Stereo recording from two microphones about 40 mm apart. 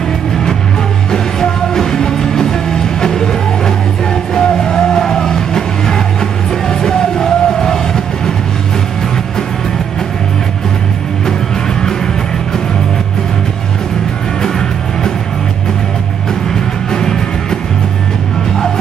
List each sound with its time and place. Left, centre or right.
1.1 s music: centre
16.9 s music: centre